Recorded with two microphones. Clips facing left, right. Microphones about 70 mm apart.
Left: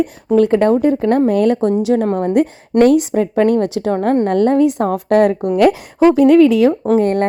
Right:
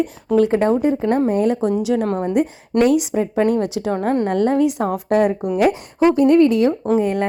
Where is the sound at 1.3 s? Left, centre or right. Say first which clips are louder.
Left 4 dB; left.